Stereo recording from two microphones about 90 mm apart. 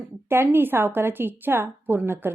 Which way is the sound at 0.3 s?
25° right (ahead or behind).